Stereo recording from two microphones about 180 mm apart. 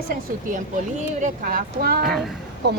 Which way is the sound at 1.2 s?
50° right (ahead or behind).